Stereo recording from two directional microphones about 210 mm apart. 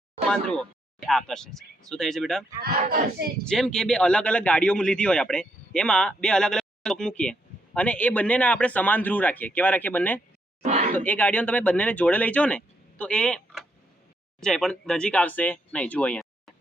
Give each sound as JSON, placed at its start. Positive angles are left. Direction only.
{"t": 0.3, "sound": "speech", "side_deg": 5}
{"t": 2.7, "sound": "speech", "side_deg": -35}
{"t": 3.4, "sound": "speech", "side_deg": 5}
{"t": 10.6, "sound": "speech", "side_deg": -30}
{"t": 10.9, "sound": "speech", "side_deg": 5}